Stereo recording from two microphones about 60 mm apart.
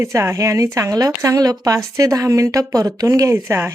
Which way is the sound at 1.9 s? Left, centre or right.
Right.